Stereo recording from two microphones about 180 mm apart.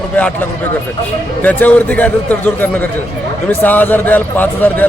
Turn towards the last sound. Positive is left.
turn(degrees=10)  # may be behind; listen again after turning